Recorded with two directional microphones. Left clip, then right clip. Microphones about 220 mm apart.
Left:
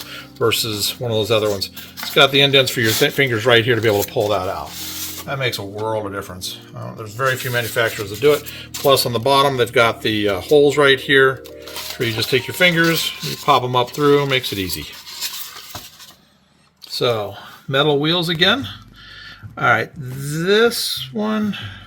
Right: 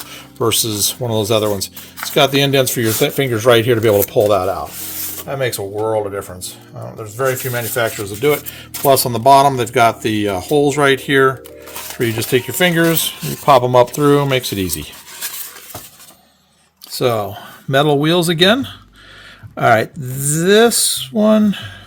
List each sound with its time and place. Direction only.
0.4 s speech: 55° right (ahead or behind)
5.3 s speech: 65° right (ahead or behind)
17.0 s speech: 60° right (ahead or behind)